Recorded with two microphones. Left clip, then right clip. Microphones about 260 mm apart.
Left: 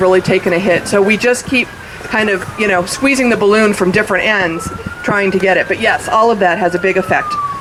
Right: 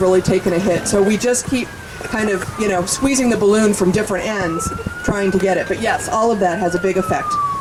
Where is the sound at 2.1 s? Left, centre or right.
Centre.